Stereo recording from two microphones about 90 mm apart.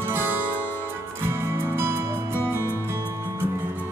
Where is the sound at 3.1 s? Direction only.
30° right (ahead or behind).